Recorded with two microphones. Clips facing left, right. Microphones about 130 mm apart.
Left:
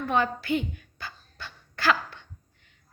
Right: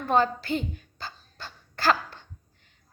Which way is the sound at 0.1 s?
35° right (ahead or behind).